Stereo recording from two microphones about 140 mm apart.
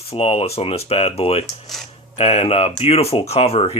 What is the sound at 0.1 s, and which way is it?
Speech, 45° left (ahead or behind).